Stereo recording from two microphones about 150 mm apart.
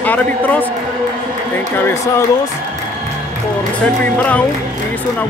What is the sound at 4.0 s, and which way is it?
Speech, 10° left (ahead or behind).